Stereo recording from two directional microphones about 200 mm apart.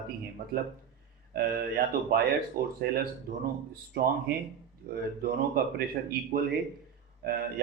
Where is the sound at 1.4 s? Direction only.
50° right (ahead or behind).